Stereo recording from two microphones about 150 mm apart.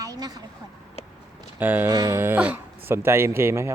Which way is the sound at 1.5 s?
10° right (ahead or behind).